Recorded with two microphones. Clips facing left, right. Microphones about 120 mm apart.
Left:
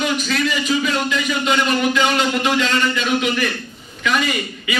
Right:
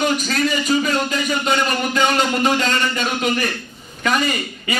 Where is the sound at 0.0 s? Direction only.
45° right (ahead or behind).